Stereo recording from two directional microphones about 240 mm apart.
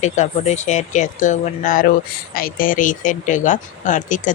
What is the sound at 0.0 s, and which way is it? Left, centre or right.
Speech, left.